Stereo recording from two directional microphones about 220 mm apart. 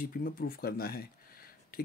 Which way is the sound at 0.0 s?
40° left (ahead or behind).